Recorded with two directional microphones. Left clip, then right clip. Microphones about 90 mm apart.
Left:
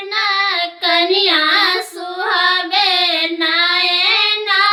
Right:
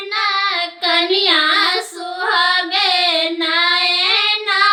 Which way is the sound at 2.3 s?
35° left (ahead or behind).